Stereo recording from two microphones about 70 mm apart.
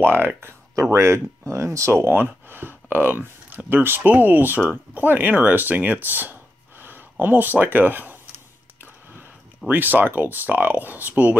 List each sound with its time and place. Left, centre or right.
0.0 s speech: right
0.9 s speech: right
8.8 s a sound: right
9.7 s speech: right